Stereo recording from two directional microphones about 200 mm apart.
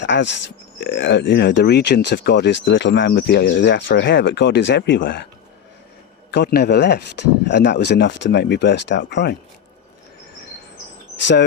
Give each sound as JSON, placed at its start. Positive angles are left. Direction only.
{"t": 0.0, "sound": "speech", "side_deg": 60}
{"t": 6.3, "sound": "speech", "side_deg": 55}